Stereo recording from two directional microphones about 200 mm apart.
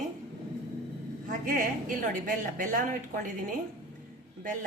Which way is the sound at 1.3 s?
45° right (ahead or behind).